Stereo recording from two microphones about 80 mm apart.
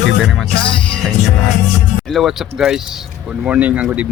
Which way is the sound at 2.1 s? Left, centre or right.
Centre.